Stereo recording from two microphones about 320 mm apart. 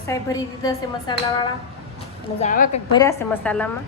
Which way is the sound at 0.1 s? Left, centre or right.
Centre.